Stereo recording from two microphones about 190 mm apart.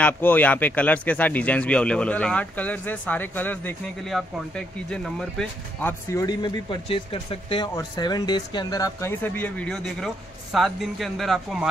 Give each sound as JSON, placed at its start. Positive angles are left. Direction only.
{"t": 0.0, "sound": "speech", "side_deg": 10}
{"t": 6.2, "sound": "speech", "side_deg": 25}